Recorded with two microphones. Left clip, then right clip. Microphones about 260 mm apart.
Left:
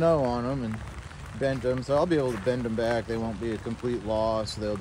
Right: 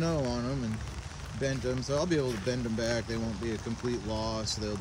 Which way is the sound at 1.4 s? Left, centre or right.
Centre.